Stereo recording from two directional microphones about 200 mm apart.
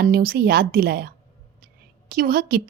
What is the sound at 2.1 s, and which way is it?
Speech, 45° right (ahead or behind).